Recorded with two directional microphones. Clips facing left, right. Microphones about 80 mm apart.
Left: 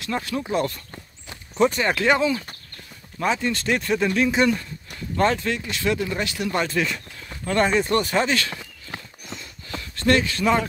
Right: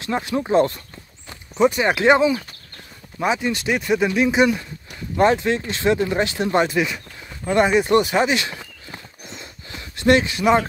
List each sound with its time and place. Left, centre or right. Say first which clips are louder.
0.0 s speech: right 4 dB; right
1.6 s speech: right 3 dB; centre
6.7 s speech: right 3 dB; centre